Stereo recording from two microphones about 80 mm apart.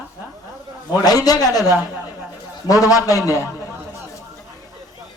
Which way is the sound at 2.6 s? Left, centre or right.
Left.